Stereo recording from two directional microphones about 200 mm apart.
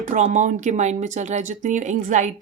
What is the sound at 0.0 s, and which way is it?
Speech, 40° right (ahead or behind).